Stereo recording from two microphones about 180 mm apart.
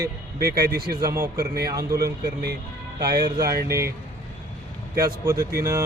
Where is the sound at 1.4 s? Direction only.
60° right (ahead or behind).